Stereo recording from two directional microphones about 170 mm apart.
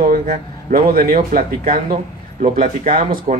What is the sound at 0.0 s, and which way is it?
Speech, 45° right (ahead or behind).